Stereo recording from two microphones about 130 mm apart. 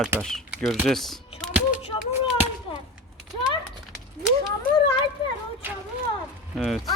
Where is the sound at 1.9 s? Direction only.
35° left (ahead or behind).